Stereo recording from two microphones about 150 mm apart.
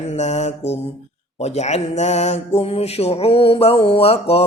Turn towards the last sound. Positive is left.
turn(degrees=40)  # may be behind; listen again after turning